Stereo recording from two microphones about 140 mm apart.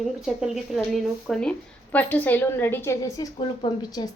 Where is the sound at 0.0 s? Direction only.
Centre (ahead or behind).